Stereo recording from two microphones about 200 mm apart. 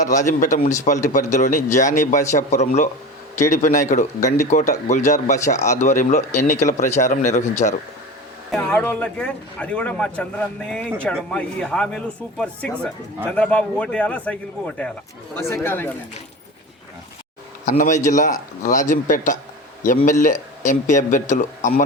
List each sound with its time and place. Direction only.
0.0 s speech: 35° left (ahead or behind)
8.5 s a man's voice: 10° left (ahead or behind)
15.4 s a man's voice: 15° left (ahead or behind)
17.7 s speech: 40° left (ahead or behind)